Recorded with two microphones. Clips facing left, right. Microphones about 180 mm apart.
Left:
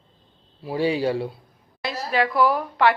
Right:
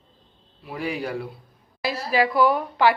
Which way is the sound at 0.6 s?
30° left (ahead or behind).